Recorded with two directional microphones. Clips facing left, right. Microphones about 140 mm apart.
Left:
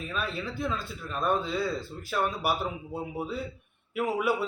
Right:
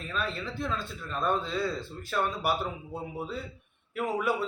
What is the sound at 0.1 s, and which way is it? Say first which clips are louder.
A man's voice: right 1 dB; 5° left (ahead or behind).